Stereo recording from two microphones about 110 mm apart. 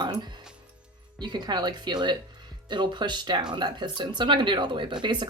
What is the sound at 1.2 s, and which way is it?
Speech, 40° right (ahead or behind).